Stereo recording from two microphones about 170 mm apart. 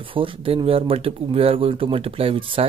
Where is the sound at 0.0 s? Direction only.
30° right (ahead or behind).